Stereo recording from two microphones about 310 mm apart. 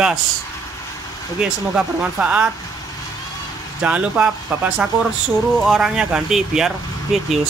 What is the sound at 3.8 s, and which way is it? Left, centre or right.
Speech, centre.